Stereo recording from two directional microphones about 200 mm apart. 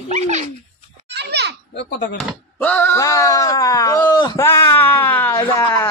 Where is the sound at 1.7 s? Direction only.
55° left (ahead or behind).